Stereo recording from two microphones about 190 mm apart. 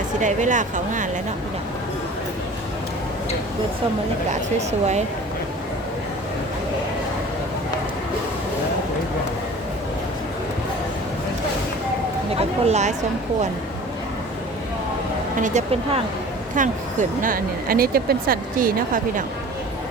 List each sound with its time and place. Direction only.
0.2 s speech: 40° right (ahead or behind)
12.3 s a sound: 30° right (ahead or behind)
15.4 s speech: 40° right (ahead or behind)